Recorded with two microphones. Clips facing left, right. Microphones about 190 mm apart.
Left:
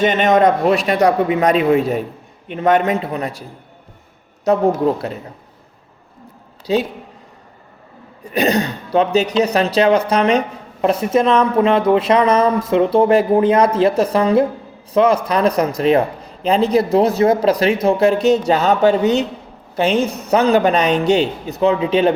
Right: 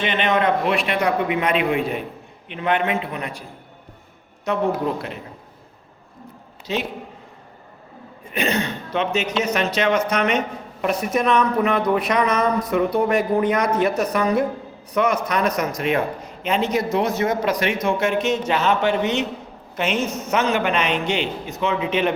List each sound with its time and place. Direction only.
0.0 s a man's voice: 45° left (ahead or behind)
4.4 s a man's voice: 40° left (ahead or behind)
6.7 s a man's voice: 35° left (ahead or behind)
8.2 s a man's voice: 40° left (ahead or behind)